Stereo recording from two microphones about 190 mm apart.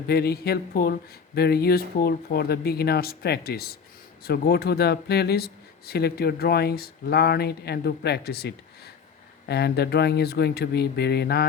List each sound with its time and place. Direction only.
0.1 s speech: 55° left (ahead or behind)